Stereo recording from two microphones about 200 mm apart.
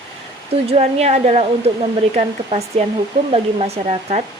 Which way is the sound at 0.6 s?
30° right (ahead or behind).